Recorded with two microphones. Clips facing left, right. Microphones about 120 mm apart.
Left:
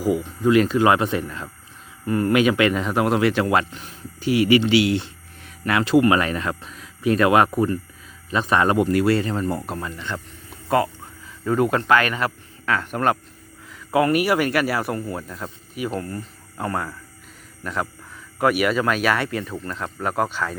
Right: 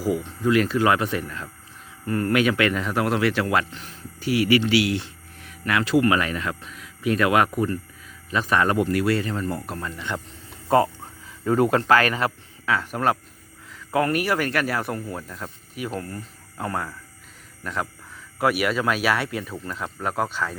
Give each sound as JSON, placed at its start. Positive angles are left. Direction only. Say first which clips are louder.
{"t": 0.0, "sound": "speech", "louder": "left 3 dB", "side_deg": 15}
{"t": 10.7, "sound": "speech", "louder": "right 1 dB", "side_deg": -30}
{"t": 12.6, "sound": "speech", "louder": "left 1 dB", "side_deg": 0}